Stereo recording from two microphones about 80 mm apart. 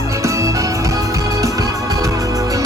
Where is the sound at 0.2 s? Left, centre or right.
Right.